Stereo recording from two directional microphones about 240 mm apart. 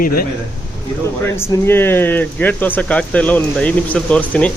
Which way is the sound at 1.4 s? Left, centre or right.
Centre.